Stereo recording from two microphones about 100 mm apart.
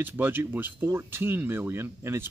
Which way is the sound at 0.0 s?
20° right (ahead or behind).